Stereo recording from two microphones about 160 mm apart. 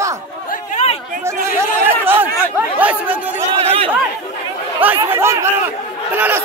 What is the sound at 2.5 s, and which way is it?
Speech, 10° right (ahead or behind).